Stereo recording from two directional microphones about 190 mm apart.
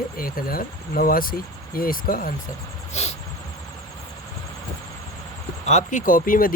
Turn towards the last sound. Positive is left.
turn(degrees=45)  # may be behind; listen again after turning